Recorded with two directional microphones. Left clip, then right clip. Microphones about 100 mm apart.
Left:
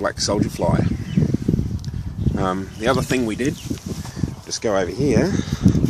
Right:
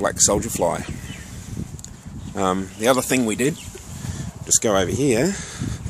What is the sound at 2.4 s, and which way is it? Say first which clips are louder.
Speech: right 2 dB; 45° right (ahead or behind).